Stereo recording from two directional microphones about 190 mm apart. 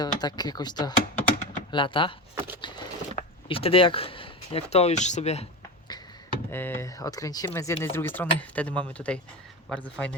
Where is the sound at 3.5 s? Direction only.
30° left (ahead or behind).